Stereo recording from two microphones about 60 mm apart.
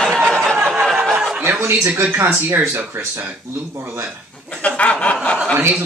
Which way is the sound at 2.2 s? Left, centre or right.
Right.